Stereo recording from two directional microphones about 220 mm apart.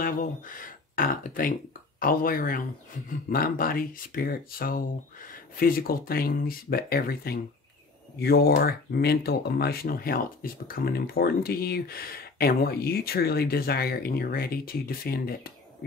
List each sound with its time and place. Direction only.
0.0 s speech: 40° left (ahead or behind)